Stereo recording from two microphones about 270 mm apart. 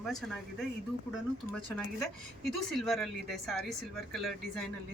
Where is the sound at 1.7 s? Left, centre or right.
Centre.